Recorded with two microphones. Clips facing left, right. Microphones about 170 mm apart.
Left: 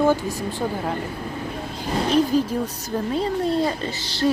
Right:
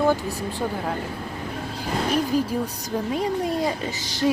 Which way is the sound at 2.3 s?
10° right (ahead or behind).